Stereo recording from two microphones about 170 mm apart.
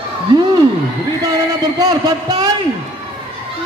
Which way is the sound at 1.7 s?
25° right (ahead or behind).